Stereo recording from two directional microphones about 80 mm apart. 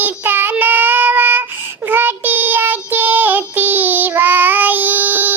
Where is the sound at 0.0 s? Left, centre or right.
Right.